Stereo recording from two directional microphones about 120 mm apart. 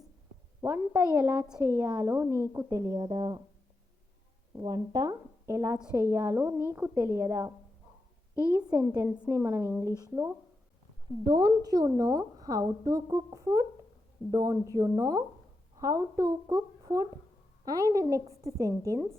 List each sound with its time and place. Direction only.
0.6 s a woman's voice: 20° right (ahead or behind); by 3.4 s 40° right (ahead or behind)
4.5 s a woman's voice: 35° right (ahead or behind)
9.3 s a woman's voice: 20° right (ahead or behind)